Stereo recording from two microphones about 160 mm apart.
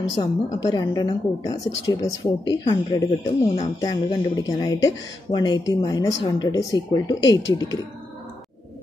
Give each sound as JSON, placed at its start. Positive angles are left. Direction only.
{"t": 0.2, "sound": "speech", "side_deg": 25}